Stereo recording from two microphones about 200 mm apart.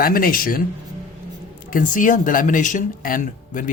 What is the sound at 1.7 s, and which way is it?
Speech, 40° left (ahead or behind).